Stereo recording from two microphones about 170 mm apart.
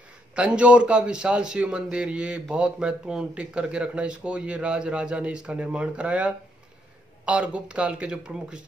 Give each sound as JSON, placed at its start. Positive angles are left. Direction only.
{"t": 0.3, "sound": "a man's voice", "side_deg": -5}